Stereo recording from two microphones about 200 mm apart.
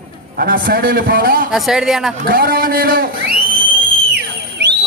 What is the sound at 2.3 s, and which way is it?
A man's voice, 45° right (ahead or behind).